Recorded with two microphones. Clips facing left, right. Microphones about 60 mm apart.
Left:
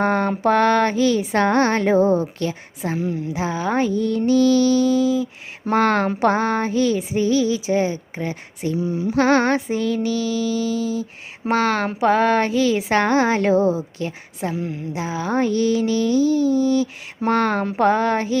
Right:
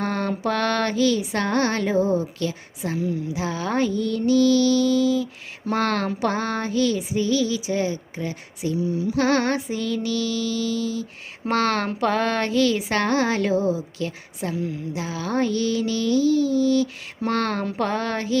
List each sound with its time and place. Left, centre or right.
0.0 s female singing: left
11.4 s female singing: centre